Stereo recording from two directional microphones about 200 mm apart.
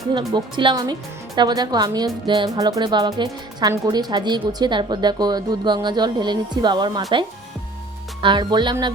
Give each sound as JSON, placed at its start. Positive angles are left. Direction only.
{"t": 0.1, "sound": "speech", "side_deg": -20}
{"t": 8.2, "sound": "speech", "side_deg": -25}